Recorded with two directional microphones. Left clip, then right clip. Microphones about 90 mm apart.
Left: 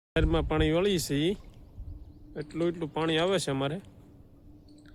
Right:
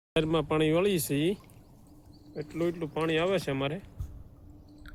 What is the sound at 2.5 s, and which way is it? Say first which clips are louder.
Speech: left 1 dB; 50° left (ahead or behind).